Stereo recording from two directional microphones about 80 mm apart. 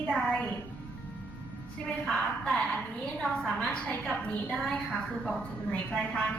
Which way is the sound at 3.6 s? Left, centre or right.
Centre.